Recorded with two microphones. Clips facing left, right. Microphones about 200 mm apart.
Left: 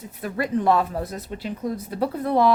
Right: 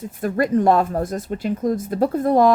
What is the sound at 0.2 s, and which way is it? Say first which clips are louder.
A woman's voice: right 6 dB; 45° right (ahead or behind).